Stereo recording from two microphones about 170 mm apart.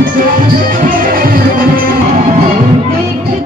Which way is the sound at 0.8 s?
55° right (ahead or behind).